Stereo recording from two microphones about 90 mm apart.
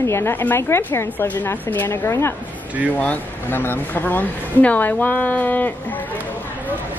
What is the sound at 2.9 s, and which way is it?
A woman's voice, 20° left (ahead or behind).